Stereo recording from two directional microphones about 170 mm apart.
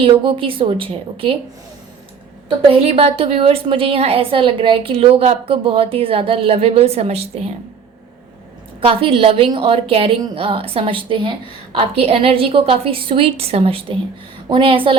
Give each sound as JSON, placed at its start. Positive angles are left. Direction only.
{"t": 0.0, "sound": "a woman's voice", "side_deg": -30}
{"t": 2.6, "sound": "a woman's voice", "side_deg": -35}
{"t": 8.8, "sound": "a woman's voice", "side_deg": -30}